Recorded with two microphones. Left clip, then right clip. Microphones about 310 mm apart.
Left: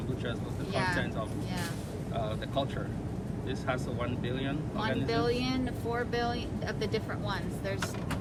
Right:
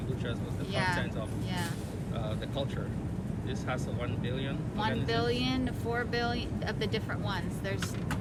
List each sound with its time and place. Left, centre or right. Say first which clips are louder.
0.7 s vehicle: even; right
5.0 s speech: left 1 dB; right